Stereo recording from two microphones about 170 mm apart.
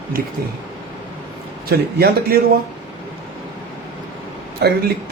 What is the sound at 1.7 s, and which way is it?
Speech, 65° right (ahead or behind).